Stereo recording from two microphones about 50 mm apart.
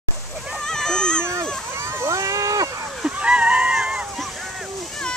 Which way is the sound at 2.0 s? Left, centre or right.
Right.